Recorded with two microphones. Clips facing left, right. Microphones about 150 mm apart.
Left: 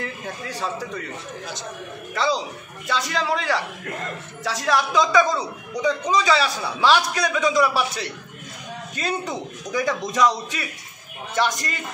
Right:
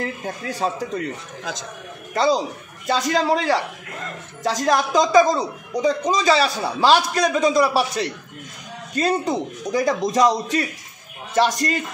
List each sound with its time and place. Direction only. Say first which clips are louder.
0.0 s a man's voice: right 4 dB; 40° right (ahead or behind)
2.1 s a man's voice: right 5 dB; 45° right (ahead or behind)